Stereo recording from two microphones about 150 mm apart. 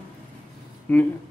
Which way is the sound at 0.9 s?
10° left (ahead or behind).